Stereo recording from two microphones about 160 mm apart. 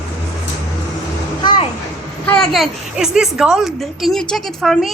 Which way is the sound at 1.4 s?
30° left (ahead or behind).